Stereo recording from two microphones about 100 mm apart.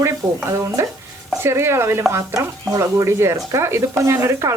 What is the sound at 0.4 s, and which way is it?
Speech, 30° right (ahead or behind).